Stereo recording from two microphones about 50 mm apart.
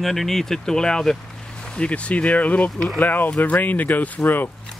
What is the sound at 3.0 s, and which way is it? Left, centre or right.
Speech, left.